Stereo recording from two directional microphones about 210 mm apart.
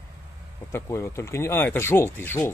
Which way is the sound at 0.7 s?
10° left (ahead or behind).